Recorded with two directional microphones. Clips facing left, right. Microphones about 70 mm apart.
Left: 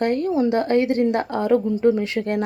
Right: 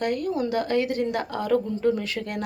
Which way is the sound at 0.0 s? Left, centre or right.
Left.